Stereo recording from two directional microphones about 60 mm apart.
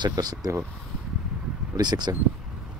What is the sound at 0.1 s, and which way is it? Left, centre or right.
Speech, right.